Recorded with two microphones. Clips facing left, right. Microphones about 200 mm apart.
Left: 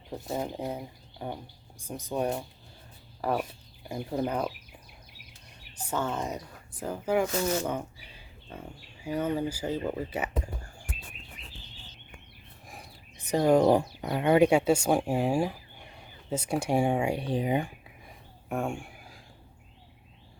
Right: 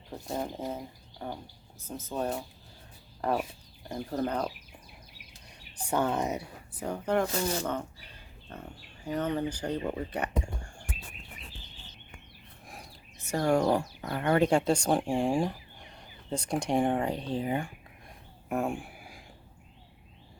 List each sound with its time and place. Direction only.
0.3 s speech: centre (ahead or behind)
1.2 s speech: 15° left (ahead or behind)
5.9 s speech: 15° right (ahead or behind)
6.7 s speech: 5° left (ahead or behind)
12.6 s a sound: centre (ahead or behind)
13.2 s speech: 20° left (ahead or behind)
18.4 s a sound: centre (ahead or behind)